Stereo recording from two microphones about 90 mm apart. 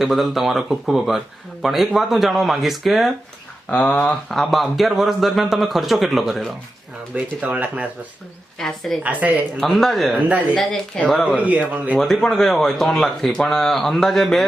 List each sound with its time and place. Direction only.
0.0 s speech: centre (ahead or behind)
3.7 s speech: 15° left (ahead or behind)
7.4 s speech: 15° right (ahead or behind)
8.5 s speech: 5° left (ahead or behind)
9.2 s speech: 15° right (ahead or behind)
9.6 s speech: centre (ahead or behind)
10.2 s speech: 15° right (ahead or behind)
10.5 s speech: 5° left (ahead or behind)
11.3 s speech: 15° right (ahead or behind)
11.9 s speech: 5° left (ahead or behind)